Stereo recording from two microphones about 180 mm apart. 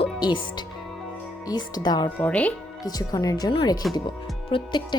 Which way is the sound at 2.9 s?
20° left (ahead or behind).